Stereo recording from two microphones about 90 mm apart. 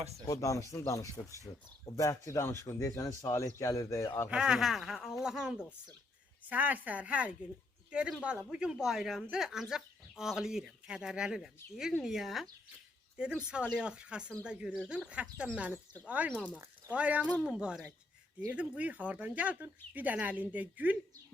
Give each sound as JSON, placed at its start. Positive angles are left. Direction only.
{"t": 0.3, "sound": "speech", "side_deg": 35}
{"t": 4.3, "sound": "speech", "side_deg": -10}